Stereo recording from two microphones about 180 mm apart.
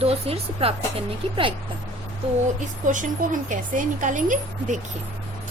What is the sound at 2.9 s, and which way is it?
A woman's voice, 45° right (ahead or behind).